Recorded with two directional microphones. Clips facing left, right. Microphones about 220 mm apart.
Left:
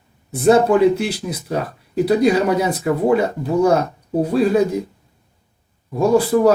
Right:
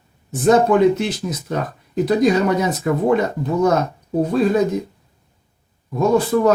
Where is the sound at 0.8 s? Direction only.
10° left (ahead or behind).